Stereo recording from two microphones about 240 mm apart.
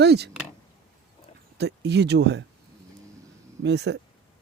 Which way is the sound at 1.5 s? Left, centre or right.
Right.